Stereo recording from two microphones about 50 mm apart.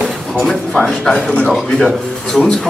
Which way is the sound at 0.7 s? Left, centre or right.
Centre.